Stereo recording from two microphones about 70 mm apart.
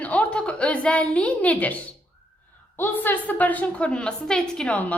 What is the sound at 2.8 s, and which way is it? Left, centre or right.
A woman's voice, left.